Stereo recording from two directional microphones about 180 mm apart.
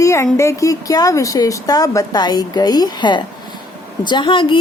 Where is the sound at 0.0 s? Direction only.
15° left (ahead or behind).